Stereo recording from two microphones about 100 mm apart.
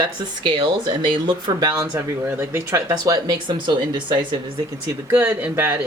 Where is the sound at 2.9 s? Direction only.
45° right (ahead or behind).